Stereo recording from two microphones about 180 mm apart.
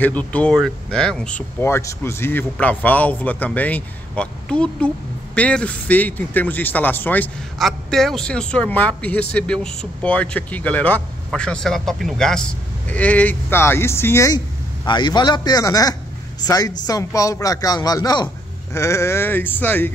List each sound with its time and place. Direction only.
0.0 s a man's voice: 10° left (ahead or behind)